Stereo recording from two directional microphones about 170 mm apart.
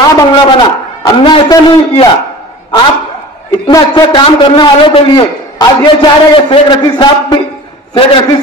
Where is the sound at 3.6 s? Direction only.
25° left (ahead or behind).